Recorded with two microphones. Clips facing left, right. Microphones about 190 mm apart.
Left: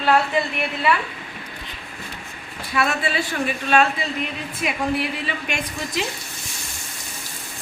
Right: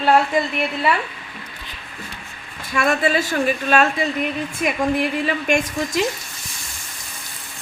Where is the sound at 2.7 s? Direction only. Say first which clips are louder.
Right 4 dB; 45° right (ahead or behind).